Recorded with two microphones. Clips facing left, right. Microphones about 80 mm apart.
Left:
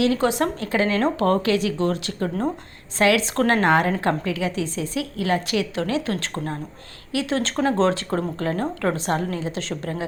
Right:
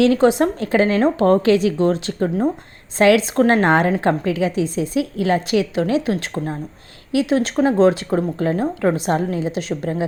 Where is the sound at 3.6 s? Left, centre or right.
Right.